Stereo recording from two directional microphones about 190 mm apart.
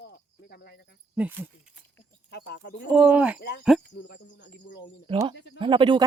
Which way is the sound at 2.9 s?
10° right (ahead or behind).